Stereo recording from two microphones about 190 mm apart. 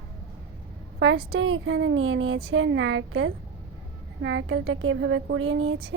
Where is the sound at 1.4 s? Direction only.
85° right.